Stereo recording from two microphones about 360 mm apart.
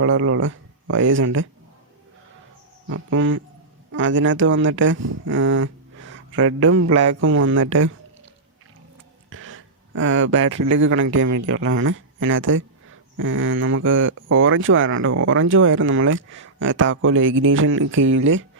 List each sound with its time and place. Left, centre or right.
0.0 s a man's voice: right
2.9 s a man's voice: right
9.3 s a sound: right
10.7 s a man's voice: right